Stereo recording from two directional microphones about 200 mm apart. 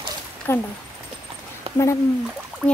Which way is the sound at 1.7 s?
30° right (ahead or behind).